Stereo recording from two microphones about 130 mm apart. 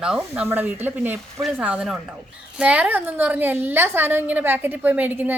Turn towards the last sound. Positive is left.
turn(degrees=-15)  # may be behind; listen again after turning